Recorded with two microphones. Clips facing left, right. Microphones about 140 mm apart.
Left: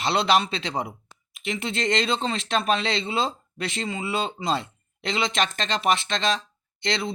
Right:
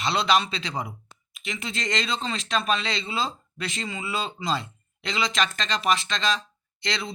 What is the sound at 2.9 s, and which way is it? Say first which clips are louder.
Speech: left 3 dB; 25° left (ahead or behind).